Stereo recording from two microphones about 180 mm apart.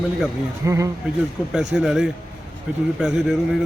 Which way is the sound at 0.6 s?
15° right (ahead or behind).